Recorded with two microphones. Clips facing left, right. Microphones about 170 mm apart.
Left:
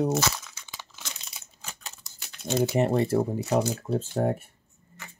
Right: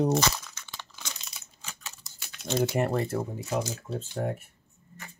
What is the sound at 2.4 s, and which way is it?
Speech, 5° left (ahead or behind).